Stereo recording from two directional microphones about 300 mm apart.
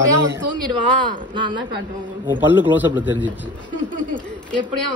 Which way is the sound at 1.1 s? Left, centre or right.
Centre.